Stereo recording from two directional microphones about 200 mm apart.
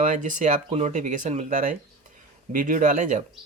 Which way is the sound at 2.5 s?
40° right (ahead or behind).